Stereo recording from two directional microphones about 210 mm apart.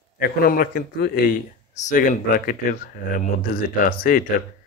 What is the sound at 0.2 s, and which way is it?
Speech, 45° left (ahead or behind).